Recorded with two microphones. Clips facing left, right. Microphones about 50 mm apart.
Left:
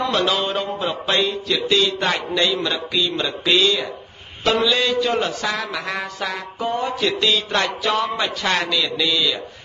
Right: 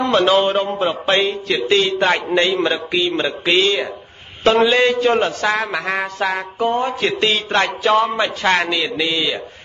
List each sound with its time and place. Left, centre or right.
0.0 s a man's voice: right